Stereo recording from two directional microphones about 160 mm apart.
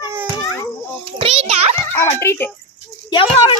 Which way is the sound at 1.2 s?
40° right (ahead or behind).